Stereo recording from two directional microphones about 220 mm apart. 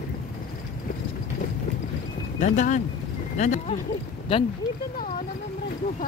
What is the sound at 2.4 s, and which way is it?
Speech, 35° left (ahead or behind).